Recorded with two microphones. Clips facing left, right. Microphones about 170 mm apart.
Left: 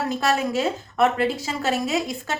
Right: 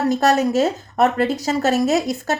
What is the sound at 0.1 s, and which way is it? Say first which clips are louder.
A woman's voice: right 6 dB; 40° right (ahead or behind).